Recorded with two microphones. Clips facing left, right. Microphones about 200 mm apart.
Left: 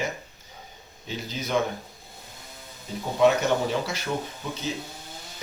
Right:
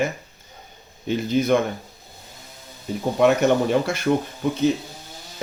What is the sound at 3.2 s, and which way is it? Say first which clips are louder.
Speech: right 3 dB; 55° right (ahead or behind).